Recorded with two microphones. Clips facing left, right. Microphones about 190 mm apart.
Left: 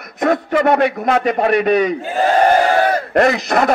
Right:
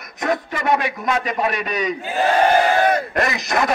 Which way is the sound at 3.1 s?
55° left (ahead or behind).